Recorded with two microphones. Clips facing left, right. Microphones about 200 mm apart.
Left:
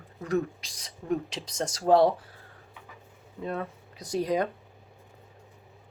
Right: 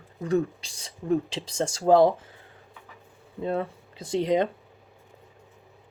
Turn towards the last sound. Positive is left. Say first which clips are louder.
# right 4 dB
turn(degrees=-25)  # may be behind; listen again after turning